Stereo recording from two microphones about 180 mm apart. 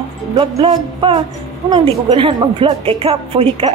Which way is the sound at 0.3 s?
30° right (ahead or behind).